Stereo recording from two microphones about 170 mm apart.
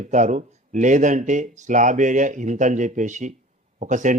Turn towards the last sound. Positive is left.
turn(degrees=-50)  # may be behind; listen again after turning